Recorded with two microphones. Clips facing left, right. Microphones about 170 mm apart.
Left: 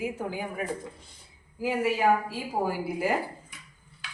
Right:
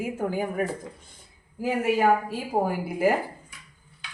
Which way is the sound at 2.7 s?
55° right (ahead or behind).